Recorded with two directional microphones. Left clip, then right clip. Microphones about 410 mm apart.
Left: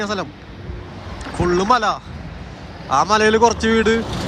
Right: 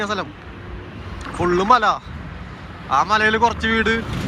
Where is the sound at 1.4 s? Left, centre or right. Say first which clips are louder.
Right 1 dB; centre.